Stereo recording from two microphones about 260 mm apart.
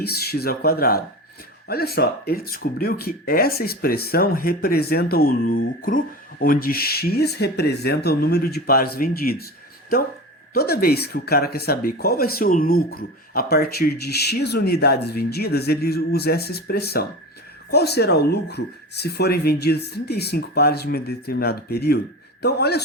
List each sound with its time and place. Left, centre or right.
0.0 s speech: left
10.5 s speech: left